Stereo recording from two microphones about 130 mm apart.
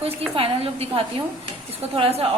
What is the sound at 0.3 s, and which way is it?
A woman's voice, 45° right (ahead or behind).